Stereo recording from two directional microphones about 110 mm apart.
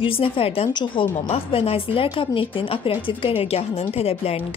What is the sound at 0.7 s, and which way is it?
Speech, 40° left (ahead or behind).